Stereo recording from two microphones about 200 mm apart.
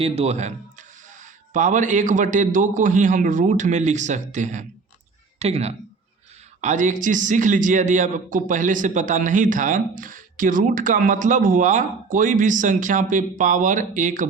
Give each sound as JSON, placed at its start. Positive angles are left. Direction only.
{"t": 0.0, "sound": "a man's voice", "side_deg": -30}